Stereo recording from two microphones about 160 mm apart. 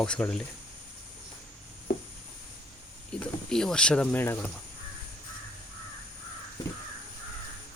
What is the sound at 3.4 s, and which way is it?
Speech, 5° left (ahead or behind).